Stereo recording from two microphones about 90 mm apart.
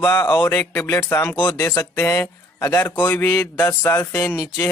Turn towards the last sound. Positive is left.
turn(degrees=30)  # may be behind; listen again after turning